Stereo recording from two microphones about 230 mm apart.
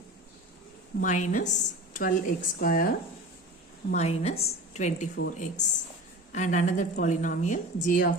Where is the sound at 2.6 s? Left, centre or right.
Left.